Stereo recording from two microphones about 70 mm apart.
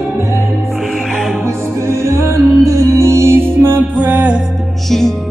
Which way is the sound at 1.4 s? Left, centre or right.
Right.